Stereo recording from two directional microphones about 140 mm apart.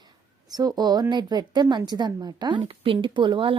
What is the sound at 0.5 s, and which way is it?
A woman's voice, 30° right (ahead or behind).